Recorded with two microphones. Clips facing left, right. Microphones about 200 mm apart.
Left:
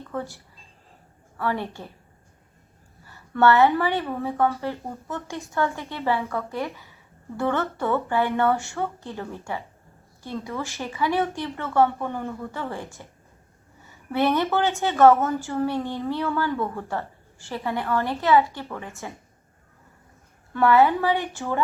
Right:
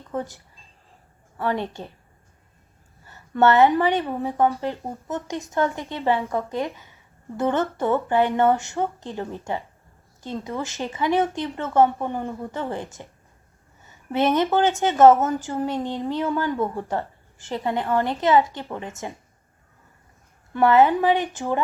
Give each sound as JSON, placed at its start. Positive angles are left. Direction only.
{"t": 0.1, "sound": "speech", "side_deg": -20}
{"t": 1.4, "sound": "a woman's voice", "side_deg": -20}
{"t": 3.1, "sound": "a woman's voice", "side_deg": -20}
{"t": 14.1, "sound": "a woman's voice", "side_deg": -15}
{"t": 20.5, "sound": "a woman's voice", "side_deg": -15}